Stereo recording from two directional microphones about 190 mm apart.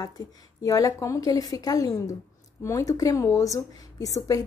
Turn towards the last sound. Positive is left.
turn(degrees=20)  # may be behind; listen again after turning